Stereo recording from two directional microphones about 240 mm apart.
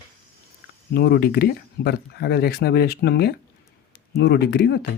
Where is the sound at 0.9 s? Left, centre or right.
Left.